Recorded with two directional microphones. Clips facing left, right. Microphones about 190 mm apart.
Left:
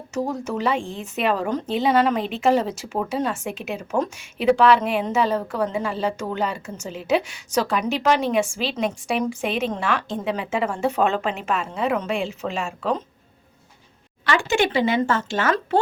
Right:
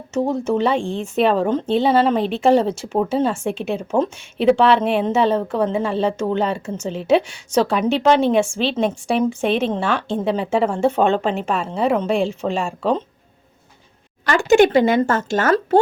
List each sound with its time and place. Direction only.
0.1 s a woman's voice: 25° right (ahead or behind)
14.3 s speech: 45° right (ahead or behind)